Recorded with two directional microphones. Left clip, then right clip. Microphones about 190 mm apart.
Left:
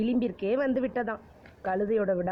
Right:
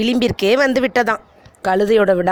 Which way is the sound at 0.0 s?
35° right (ahead or behind).